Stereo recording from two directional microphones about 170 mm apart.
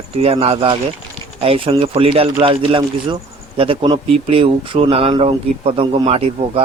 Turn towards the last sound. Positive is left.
turn(degrees=-35)  # may be behind; listen again after turning